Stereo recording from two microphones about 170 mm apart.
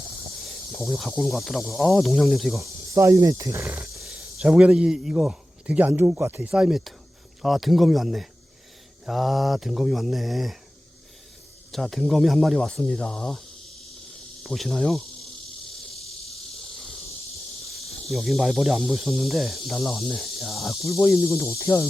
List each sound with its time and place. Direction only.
0.4 s speech: centre (ahead or behind)
2.6 s speech: 20° right (ahead or behind); by 10.6 s centre (ahead or behind)
11.7 s speech: centre (ahead or behind)
14.4 s insect: centre (ahead or behind)
17.8 s speech: centre (ahead or behind)
20.9 s speech: 15° left (ahead or behind)